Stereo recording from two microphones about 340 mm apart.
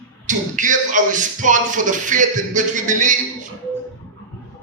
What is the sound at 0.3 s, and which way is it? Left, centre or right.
A man's voice, right.